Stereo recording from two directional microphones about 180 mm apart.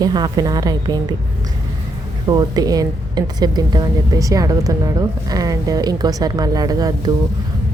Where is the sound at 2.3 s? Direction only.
20° right (ahead or behind).